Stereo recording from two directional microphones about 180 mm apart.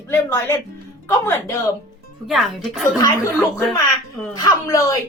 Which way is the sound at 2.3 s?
Centre (ahead or behind).